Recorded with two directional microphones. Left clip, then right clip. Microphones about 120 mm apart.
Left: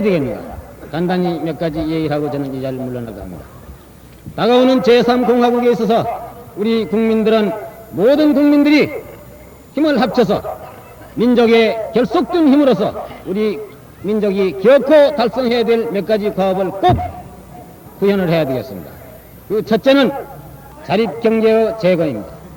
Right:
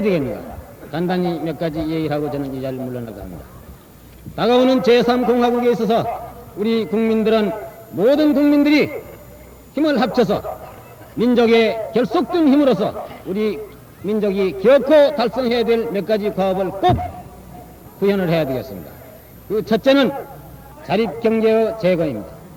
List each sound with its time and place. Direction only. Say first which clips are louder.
0.0 s a man's voice: left 3 dB; 35° right (ahead or behind)
4.4 s a man's voice: left 3 dB; 35° right (ahead or behind)